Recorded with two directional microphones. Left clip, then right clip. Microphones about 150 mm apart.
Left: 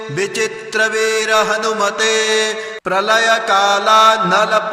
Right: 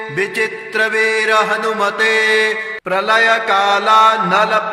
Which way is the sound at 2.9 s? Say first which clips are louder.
Right 1 dB; 35° left (ahead or behind).